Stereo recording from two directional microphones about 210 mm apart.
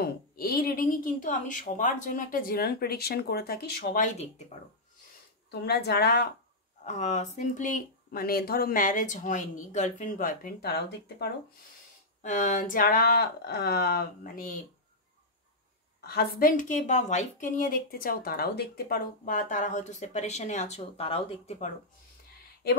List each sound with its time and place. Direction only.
0.0 s speech: 45° left (ahead or behind)
5.5 s speech: 50° left (ahead or behind)
6.8 s a woman's voice: 35° left (ahead or behind); by 11.3 s 50° left (ahead or behind)
12.2 s speech: 35° left (ahead or behind)
16.0 s a woman's voice: 50° left (ahead or behind); by 21.7 s 35° left (ahead or behind)